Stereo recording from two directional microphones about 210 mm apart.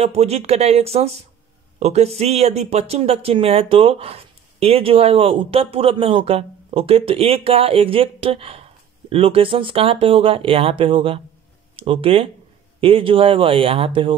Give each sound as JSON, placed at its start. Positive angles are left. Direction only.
{"t": 0.0, "sound": "speech", "side_deg": -30}